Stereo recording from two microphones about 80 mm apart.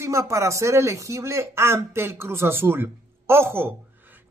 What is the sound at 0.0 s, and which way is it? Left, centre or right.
A man's voice, right.